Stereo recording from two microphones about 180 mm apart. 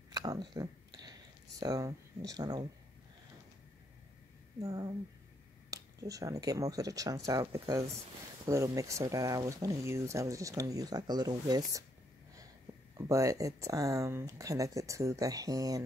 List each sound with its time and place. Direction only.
0.1 s a sound: 20° right (ahead or behind)
1.6 s speech: 20° right (ahead or behind)
4.6 s speech: 20° right (ahead or behind)
12.9 s speech: 20° right (ahead or behind)